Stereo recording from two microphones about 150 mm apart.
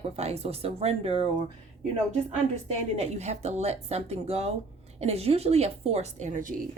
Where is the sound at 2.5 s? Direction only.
50° right (ahead or behind).